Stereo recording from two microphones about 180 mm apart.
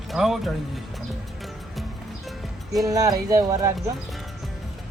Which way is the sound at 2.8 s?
20° right (ahead or behind).